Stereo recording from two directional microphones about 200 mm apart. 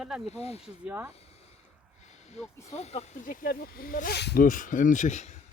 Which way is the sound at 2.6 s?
35° left (ahead or behind).